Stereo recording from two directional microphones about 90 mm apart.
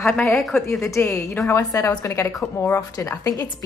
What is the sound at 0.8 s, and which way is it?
A woman's voice, 35° left (ahead or behind).